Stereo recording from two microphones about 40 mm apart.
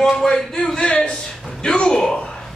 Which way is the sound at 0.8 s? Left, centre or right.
Left.